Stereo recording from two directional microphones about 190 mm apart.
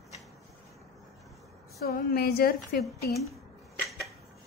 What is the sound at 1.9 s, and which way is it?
Speech, 55° left (ahead or behind).